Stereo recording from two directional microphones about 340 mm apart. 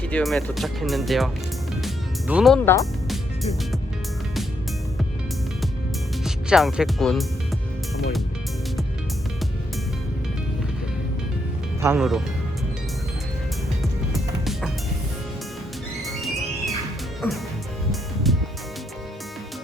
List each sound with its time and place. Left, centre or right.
0.0 s speech: centre
1.8 s music: centre
6.2 s speech: centre
11.8 s speech: centre
14.1 s music: centre
16.0 s music: centre
17.2 s speech: centre
18.3 s music: centre